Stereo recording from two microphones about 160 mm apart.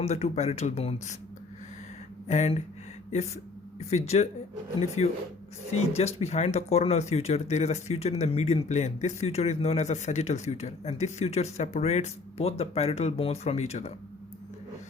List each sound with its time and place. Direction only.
0.0 s speech: 40° left (ahead or behind)
2.2 s speech: 45° left (ahead or behind)
3.8 s speech: 40° left (ahead or behind)